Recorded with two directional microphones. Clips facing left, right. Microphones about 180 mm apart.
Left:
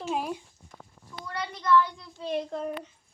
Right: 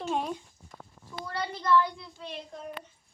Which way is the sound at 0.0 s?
5° left (ahead or behind).